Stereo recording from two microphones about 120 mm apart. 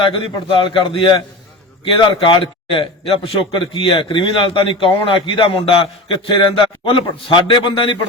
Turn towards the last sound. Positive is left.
turn(degrees=45)  # may be behind; listen again after turning